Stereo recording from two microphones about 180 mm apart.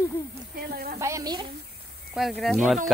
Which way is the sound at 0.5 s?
55° right (ahead or behind).